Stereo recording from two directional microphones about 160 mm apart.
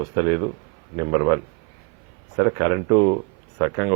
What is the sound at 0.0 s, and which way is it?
Speech, 20° right (ahead or behind).